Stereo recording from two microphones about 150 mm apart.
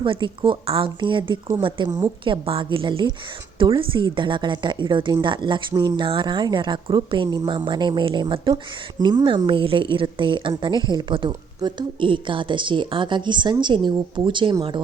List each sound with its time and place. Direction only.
0.0 s a woman's voice: 30° right (ahead or behind)